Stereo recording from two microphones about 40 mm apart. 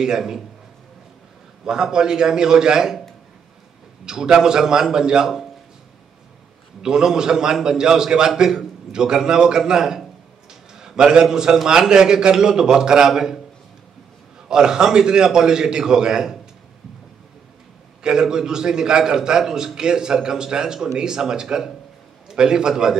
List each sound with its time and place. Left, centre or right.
0.0 s a man's voice: centre
1.6 s a man's voice: centre
4.0 s a man's voice: centre
6.8 s a man's voice: centre
10.5 s a sound: centre
11.5 s a man's voice: centre
14.5 s a man's voice: centre
18.0 s a man's voice: centre